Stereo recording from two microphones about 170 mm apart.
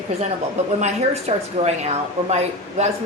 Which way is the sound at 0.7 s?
40° right (ahead or behind).